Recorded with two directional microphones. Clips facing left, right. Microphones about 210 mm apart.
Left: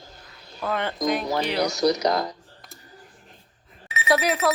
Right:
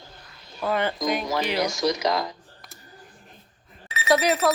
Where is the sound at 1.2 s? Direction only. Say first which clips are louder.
Left 1 dB; 35° left (ahead or behind).